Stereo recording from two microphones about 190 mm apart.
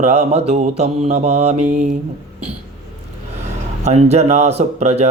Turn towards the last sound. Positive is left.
turn(degrees=-35)  # may be behind; listen again after turning